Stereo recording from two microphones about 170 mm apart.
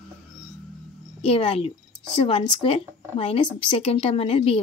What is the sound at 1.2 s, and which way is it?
A woman's voice, 35° left (ahead or behind).